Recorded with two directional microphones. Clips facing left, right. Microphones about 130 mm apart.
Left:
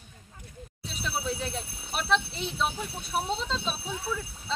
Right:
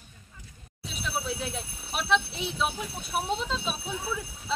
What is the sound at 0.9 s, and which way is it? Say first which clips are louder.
Speech: even; centre (ahead or behind).